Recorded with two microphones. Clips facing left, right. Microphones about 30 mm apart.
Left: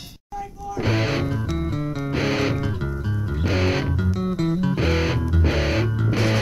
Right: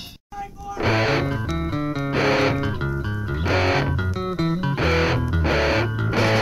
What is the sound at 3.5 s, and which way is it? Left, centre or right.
Music, right.